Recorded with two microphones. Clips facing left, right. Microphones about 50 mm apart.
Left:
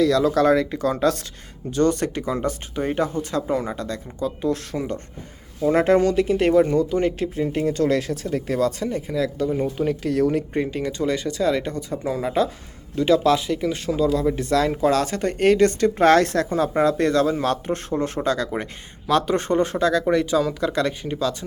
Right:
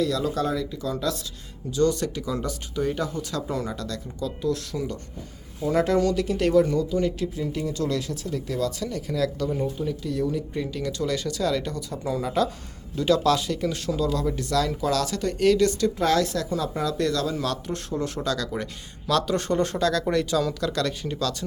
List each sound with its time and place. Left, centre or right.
0.1 s speech: left
8.9 s speech: left
9.7 s speech: left
10.6 s speech: left